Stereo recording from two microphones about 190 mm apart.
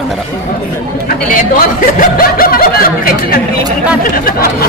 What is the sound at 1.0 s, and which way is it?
Speech, 50° left (ahead or behind).